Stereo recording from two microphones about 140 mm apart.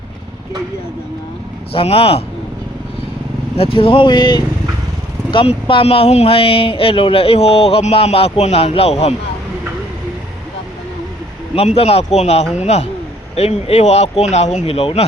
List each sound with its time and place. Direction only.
1.7 s speech: 40° left (ahead or behind)
3.6 s speech: 40° left (ahead or behind)
11.5 s speech: 45° left (ahead or behind)